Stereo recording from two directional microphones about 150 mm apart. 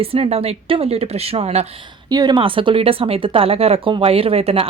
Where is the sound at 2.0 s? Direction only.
30° right (ahead or behind).